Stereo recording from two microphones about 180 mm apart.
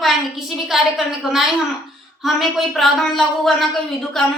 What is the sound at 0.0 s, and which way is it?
A woman's voice, centre (ahead or behind).